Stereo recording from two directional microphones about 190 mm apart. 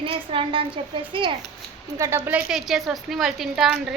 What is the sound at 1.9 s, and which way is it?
A woman's voice, 15° right (ahead or behind).